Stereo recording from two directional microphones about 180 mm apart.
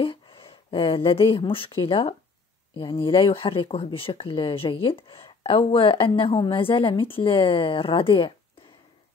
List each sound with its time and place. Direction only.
0.0 s speech: 30° left (ahead or behind)